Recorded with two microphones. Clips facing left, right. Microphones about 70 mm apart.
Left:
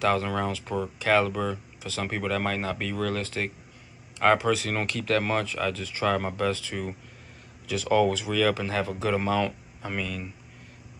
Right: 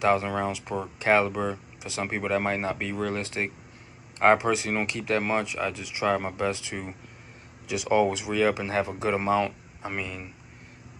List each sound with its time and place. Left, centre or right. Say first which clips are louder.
0.0 s speech: right 1 dB; centre
0.9 s speech: right 1 dB; right